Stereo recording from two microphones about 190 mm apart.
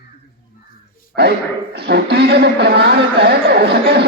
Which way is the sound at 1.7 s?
60° right (ahead or behind).